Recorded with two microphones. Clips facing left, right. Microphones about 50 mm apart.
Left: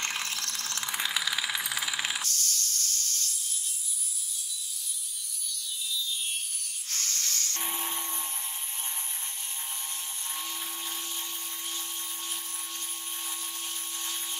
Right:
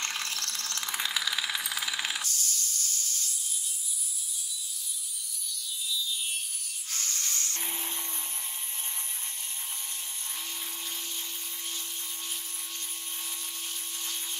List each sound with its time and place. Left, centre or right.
0.0 s mechanisms: centre
2.2 s snake: centre
6.9 s a sound: centre
7.6 s electric toothbrush: centre